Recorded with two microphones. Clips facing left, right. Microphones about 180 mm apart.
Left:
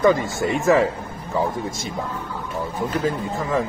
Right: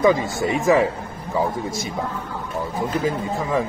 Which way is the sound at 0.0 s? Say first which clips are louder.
Even; centre (ahead or behind).